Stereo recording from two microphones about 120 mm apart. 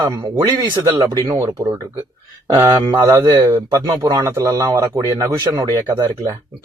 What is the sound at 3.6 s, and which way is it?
Speech, 35° right (ahead or behind).